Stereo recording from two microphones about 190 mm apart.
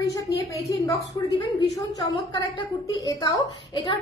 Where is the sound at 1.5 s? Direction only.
20° left (ahead or behind).